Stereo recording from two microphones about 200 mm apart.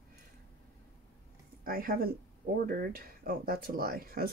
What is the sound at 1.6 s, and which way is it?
Speech, 45° right (ahead or behind).